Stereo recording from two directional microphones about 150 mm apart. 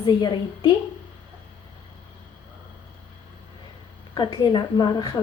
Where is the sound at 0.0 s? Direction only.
30° left (ahead or behind).